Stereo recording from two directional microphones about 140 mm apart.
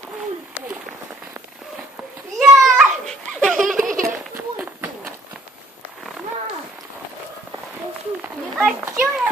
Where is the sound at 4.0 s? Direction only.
15° right (ahead or behind).